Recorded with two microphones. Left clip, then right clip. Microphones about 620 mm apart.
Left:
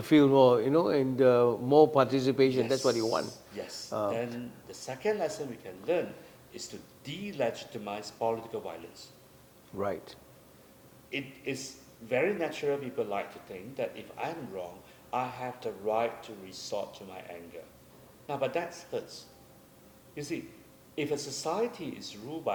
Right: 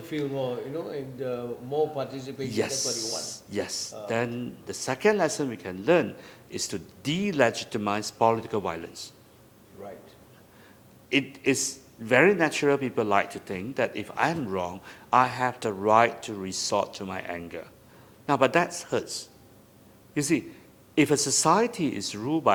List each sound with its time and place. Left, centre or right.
0.1 s speech: left
3.5 s a man's voice: right
11.1 s a man's voice: right